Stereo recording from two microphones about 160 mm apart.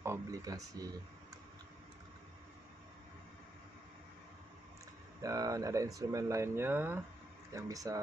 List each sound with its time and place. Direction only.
0.0 s speech: 20° right (ahead or behind)
5.2 s speech: 20° right (ahead or behind)